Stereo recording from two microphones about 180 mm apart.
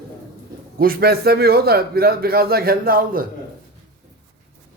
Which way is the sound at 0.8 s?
55° right (ahead or behind).